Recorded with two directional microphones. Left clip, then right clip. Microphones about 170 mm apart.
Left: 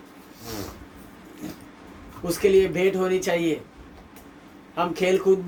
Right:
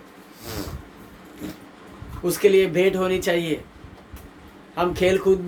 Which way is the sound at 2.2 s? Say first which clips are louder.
Right 2 dB; 25° right (ahead or behind).